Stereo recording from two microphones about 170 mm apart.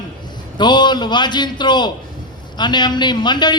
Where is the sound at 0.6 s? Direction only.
25° left (ahead or behind).